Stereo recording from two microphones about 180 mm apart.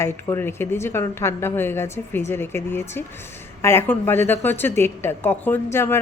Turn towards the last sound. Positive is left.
turn(degrees=15)  # may be behind; listen again after turning